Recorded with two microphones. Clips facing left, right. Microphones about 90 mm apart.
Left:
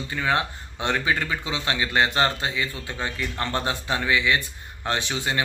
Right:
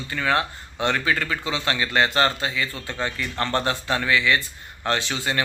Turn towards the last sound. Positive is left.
turn(degrees=15)  # may be behind; listen again after turning